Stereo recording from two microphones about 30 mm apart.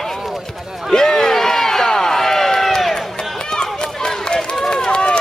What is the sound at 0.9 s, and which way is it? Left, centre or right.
Crowd, left.